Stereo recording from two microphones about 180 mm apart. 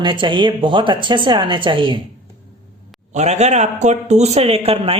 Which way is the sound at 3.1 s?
40° right (ahead or behind).